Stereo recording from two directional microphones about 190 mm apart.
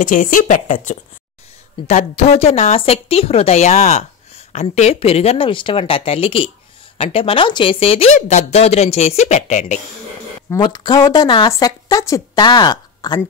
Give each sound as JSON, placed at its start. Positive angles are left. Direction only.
{"t": 0.0, "sound": "a woman's voice", "side_deg": 45}
{"t": 10.5, "sound": "a woman's voice", "side_deg": 20}